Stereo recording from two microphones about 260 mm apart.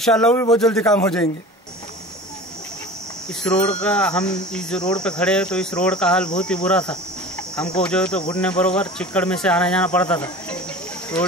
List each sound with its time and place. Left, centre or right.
0.0 s cricket: centre
3.4 s cricket: centre